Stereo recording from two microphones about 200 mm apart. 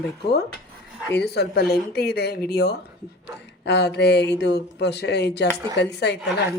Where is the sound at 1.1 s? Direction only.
55° left (ahead or behind).